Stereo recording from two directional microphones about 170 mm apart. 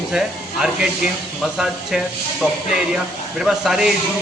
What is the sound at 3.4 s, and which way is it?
Speech, 5° right (ahead or behind).